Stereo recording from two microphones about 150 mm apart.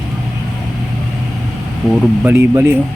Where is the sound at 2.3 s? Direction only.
15° right (ahead or behind).